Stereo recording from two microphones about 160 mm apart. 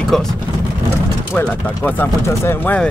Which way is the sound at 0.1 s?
Centre (ahead or behind).